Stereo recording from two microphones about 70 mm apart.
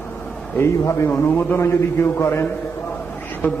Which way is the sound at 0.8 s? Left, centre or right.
Left.